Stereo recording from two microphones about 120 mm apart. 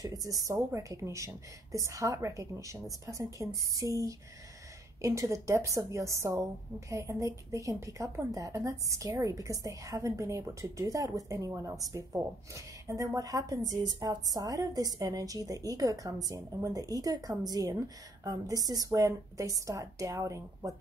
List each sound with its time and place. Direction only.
0.0 s a woman's voice: 30° right (ahead or behind)